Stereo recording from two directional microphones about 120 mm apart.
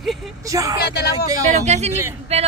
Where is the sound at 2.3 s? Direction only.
60° right (ahead or behind).